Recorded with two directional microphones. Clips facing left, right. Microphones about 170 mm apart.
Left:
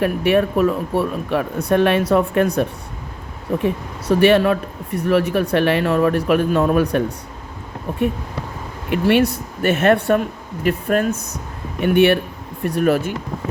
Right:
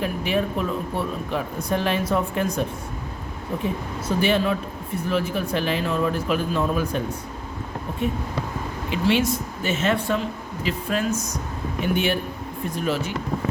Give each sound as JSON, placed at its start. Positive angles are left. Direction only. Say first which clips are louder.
{"t": 0.0, "sound": "speech", "louder": "left 7 dB", "side_deg": 60}
{"t": 4.1, "sound": "speech", "louder": "left 8 dB", "side_deg": 65}
{"t": 8.9, "sound": "speech", "louder": "left 6 dB", "side_deg": 60}